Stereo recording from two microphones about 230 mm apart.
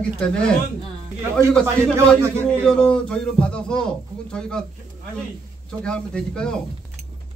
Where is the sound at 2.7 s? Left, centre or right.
Centre.